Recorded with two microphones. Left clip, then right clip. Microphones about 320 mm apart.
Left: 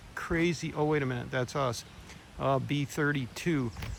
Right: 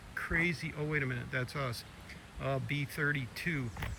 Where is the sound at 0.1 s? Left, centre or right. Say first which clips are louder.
Left 2 dB; centre.